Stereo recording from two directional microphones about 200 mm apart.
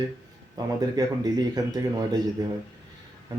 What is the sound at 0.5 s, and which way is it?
Speech, 20° right (ahead or behind).